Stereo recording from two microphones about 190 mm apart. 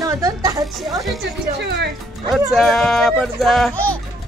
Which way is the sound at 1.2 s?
65° right (ahead or behind).